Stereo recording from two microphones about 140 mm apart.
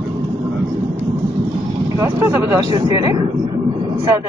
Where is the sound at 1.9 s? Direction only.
15° right (ahead or behind).